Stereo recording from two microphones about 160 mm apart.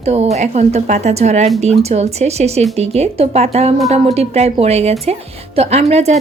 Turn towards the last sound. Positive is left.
turn(degrees=-40)  # may be behind; listen again after turning